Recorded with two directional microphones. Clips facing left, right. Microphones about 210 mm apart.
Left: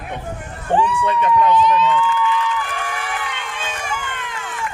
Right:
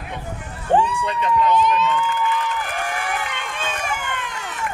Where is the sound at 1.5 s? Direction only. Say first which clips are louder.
Left 3 dB; 50° right (ahead or behind).